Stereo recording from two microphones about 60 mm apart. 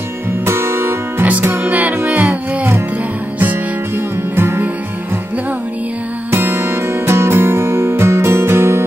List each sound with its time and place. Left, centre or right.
0.5 s music: right
1.4 s music: right
1.7 s music: right
4.4 s music: right
6.3 s music: right